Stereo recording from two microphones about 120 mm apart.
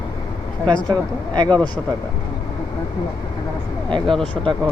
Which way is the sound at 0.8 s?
35° right (ahead or behind).